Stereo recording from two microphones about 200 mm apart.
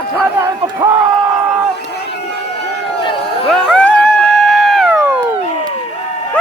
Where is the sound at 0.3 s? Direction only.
15° right (ahead or behind).